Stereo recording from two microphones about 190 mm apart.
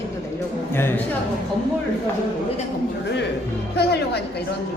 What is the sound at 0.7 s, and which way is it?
Speech, 10° left (ahead or behind).